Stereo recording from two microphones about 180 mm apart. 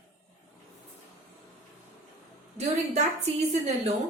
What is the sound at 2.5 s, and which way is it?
A woman's voice, 40° right (ahead or behind).